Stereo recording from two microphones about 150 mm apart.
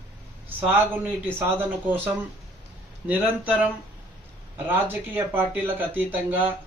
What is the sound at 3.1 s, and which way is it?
Speech, 10° right (ahead or behind).